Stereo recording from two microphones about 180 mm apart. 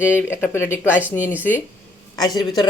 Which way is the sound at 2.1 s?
20° left (ahead or behind).